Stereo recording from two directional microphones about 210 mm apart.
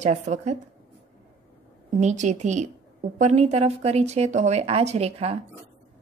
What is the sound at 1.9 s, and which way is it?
Speech, 35° right (ahead or behind).